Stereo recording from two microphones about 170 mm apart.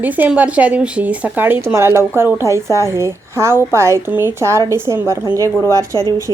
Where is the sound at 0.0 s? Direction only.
10° right (ahead or behind).